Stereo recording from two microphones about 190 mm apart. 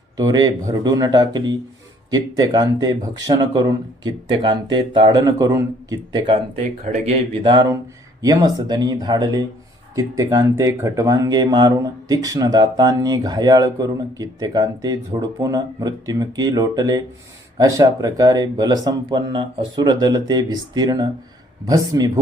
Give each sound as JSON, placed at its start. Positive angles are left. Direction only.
{"t": 0.2, "sound": "speech", "side_deg": -20}
{"t": 6.8, "sound": "speech", "side_deg": -35}